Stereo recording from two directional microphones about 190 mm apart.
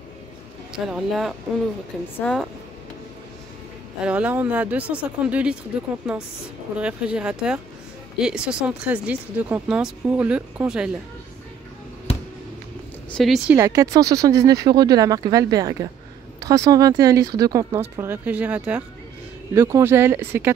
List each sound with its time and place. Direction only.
0.7 s speech: centre (ahead or behind)
4.0 s speech: 5° right (ahead or behind)
13.1 s speech: centre (ahead or behind)
13.6 s speech: 15° right (ahead or behind)